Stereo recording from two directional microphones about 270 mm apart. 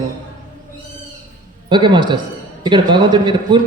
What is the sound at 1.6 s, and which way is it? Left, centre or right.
Speech, centre.